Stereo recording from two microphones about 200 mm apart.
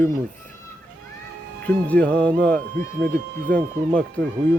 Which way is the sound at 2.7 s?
50° right (ahead or behind).